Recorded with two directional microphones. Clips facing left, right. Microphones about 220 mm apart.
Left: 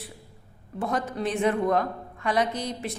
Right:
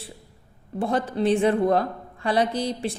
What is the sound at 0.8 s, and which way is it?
A woman's voice, 30° right (ahead or behind).